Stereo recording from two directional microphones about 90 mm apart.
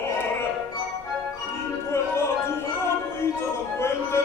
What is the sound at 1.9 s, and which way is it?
Music, 30° left (ahead or behind).